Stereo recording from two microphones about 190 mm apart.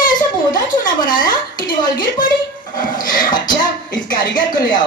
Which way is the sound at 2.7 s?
45° left (ahead or behind).